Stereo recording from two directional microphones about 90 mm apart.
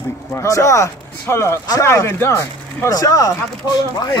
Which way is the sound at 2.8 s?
40° left (ahead or behind).